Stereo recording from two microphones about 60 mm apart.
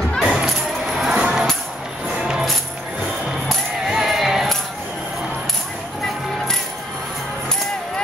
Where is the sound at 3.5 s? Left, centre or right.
Centre.